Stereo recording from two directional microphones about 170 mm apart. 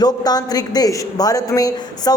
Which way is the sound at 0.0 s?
25° left (ahead or behind).